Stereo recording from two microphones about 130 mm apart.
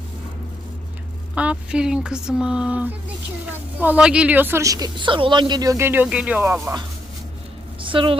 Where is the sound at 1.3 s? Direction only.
10° right (ahead or behind).